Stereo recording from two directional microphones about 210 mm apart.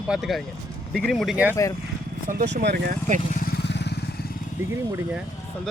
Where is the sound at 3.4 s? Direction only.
50° left (ahead or behind).